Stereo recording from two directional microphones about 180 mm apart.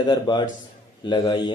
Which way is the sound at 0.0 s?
25° left (ahead or behind).